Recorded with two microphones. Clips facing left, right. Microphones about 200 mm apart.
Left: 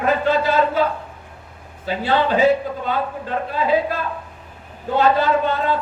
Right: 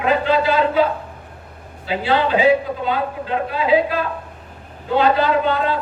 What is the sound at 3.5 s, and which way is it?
Speech, 45° left (ahead or behind).